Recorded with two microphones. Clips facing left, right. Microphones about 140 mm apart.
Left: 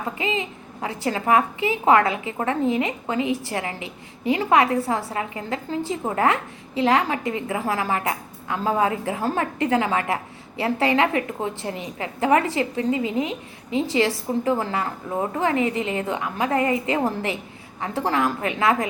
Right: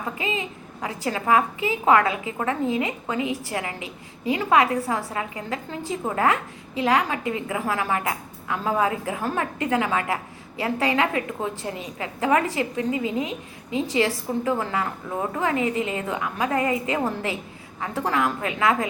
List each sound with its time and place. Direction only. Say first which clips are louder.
0.2 s a woman's voice: left 2 dB; 25° left (ahead or behind)